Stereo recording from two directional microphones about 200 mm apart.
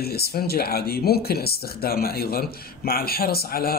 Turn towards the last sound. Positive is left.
turn(degrees=50)  # may be behind; listen again after turning